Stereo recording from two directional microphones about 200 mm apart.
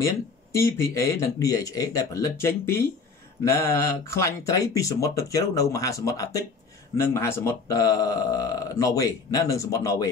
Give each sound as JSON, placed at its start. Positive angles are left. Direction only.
{"t": 0.0, "sound": "speech", "side_deg": 15}